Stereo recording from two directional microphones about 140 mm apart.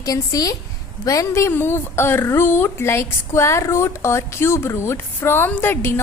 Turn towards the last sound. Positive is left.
turn(degrees=15)  # may be behind; listen again after turning